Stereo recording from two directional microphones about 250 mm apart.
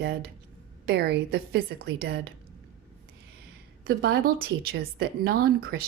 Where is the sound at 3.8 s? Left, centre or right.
Right.